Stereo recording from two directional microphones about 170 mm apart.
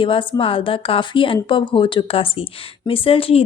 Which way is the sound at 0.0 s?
30° left (ahead or behind).